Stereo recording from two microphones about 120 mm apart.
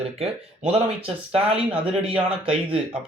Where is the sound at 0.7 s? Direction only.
50° right (ahead or behind).